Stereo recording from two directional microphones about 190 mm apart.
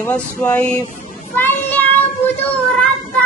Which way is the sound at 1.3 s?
10° left (ahead or behind).